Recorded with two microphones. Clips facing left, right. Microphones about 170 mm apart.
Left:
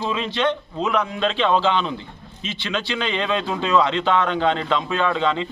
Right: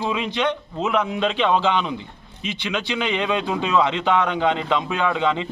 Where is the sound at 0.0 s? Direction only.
10° right (ahead or behind).